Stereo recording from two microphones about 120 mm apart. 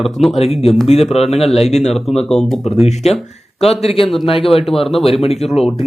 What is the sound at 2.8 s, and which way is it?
Speech, 65° left (ahead or behind).